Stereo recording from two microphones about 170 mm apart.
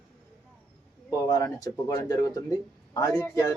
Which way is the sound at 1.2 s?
20° left (ahead or behind).